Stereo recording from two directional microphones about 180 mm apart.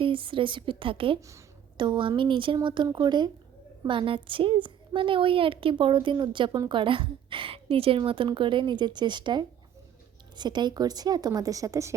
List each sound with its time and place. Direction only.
0.0 s a woman's voice: 30° right (ahead or behind)